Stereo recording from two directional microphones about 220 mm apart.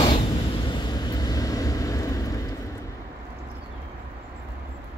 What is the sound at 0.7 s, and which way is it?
Vehicle, 20° left (ahead or behind).